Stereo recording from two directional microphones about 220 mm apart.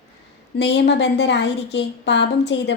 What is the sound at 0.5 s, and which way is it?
A woman's voice, 50° left (ahead or behind).